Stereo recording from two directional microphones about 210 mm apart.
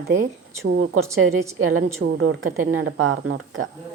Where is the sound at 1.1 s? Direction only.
90° right; by 3.7 s 70° right (ahead or behind).